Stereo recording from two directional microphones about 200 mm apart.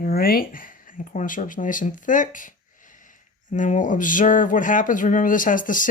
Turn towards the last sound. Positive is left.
turn(degrees=40)  # may be behind; listen again after turning